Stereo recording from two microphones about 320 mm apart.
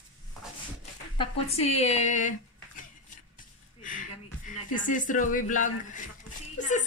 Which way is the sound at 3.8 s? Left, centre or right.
Left.